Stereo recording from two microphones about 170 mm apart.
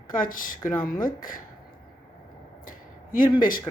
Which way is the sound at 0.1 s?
55° left (ahead or behind).